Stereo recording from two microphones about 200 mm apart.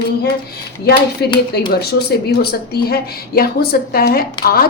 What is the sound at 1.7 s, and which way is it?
Speech, 50° left (ahead or behind).